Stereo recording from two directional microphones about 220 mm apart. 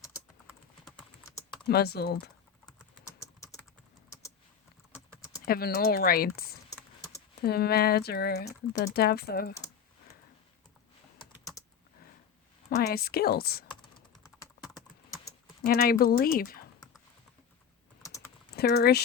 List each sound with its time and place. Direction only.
0.9 s typing: centre (ahead or behind)
1.6 s speech: 45° left (ahead or behind)
3.2 s typing: 15° left (ahead or behind)
5.5 s speech: 45° left (ahead or behind)
6.7 s typing: 15° left (ahead or behind)
7.4 s speech: 45° left (ahead or behind)
12.7 s speech: 45° left (ahead or behind)
15.6 s speech: 45° left (ahead or behind)
18.0 s typing: 15° left (ahead or behind)
18.5 s speech: 45° left (ahead or behind)